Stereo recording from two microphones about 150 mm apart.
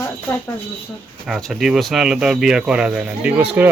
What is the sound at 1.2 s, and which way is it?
Speech, centre (ahead or behind).